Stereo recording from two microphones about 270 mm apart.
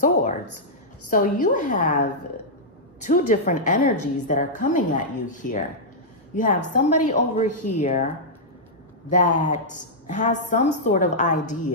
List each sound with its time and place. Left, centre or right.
0.0 s a sound: left
1.0 s a woman's voice: left
9.1 s a woman's voice: left